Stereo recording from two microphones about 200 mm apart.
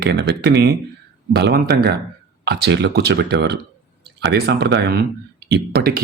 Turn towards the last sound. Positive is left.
turn(degrees=-50)  # may be behind; listen again after turning